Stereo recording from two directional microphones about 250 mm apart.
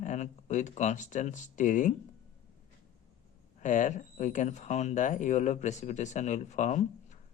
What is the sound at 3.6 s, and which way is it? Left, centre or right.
Speech, left.